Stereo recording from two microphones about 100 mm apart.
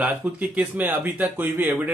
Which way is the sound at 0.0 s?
15° right (ahead or behind).